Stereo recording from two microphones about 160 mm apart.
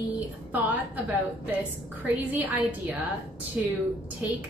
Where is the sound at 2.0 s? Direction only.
10° right (ahead or behind).